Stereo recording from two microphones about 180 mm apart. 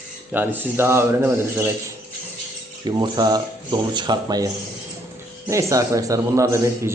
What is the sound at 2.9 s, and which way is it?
A man's voice, 20° right (ahead or behind).